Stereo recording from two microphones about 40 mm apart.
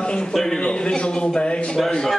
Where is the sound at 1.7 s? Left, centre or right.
Centre.